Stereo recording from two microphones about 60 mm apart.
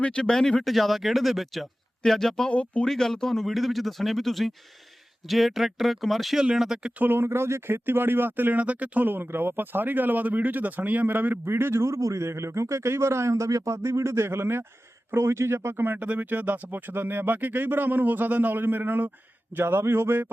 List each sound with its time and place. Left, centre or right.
0.0 s speech: centre
2.5 s speech: left
2.8 s speech: centre
7.0 s a man's voice: right
7.9 s speech: right
9.0 s speech: right
11.4 s a man's voice: right
16.0 s speech: right